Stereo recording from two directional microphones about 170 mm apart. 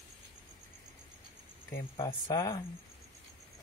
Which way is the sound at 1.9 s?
25° left (ahead or behind).